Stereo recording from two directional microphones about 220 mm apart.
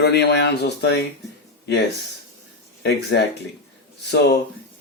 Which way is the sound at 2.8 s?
50° left (ahead or behind).